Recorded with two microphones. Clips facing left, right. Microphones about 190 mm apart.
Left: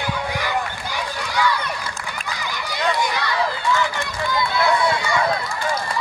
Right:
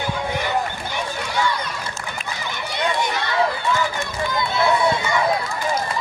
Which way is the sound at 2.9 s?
25° right (ahead or behind).